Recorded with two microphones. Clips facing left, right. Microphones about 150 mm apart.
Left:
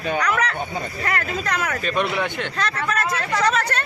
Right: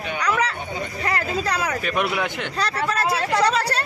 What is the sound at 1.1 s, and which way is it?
Speech, 30° right (ahead or behind).